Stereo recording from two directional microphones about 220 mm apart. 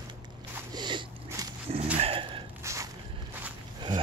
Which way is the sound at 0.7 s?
20° right (ahead or behind).